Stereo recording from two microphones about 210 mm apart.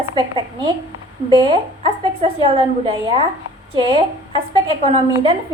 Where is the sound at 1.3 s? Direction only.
25° right (ahead or behind).